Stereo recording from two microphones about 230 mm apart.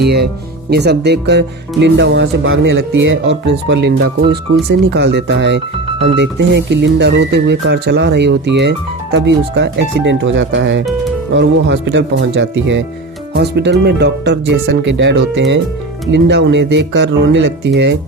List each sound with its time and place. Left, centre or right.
0.0 s speech: right